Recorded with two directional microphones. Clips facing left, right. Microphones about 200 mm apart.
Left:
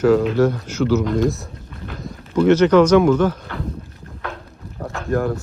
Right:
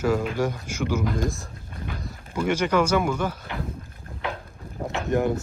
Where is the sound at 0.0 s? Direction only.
10° right (ahead or behind).